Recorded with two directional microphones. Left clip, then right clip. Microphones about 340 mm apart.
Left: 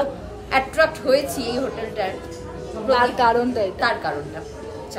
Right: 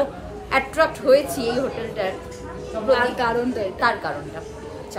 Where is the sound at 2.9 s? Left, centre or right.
Centre.